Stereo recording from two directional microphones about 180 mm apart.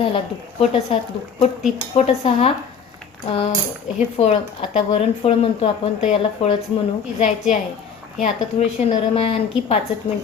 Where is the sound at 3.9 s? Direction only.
40° left (ahead or behind).